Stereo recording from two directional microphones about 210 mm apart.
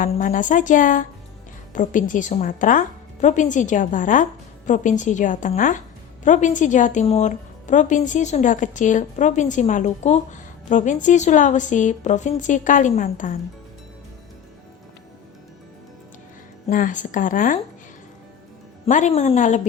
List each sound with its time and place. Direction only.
0.0 s a woman's voice: 40° left (ahead or behind)
16.6 s a woman's voice: 40° left (ahead or behind)
18.9 s a woman's voice: 35° left (ahead or behind)